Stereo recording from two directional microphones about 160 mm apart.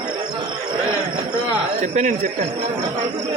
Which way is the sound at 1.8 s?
50° right (ahead or behind).